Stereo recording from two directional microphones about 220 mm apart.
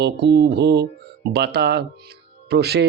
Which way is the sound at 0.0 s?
50° right (ahead or behind).